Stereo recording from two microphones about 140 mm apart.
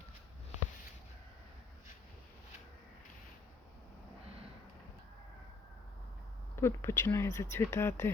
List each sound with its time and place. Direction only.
6.6 s speech: 20° left (ahead or behind)